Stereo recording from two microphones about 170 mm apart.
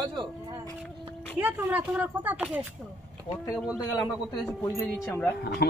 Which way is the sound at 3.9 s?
20° left (ahead or behind).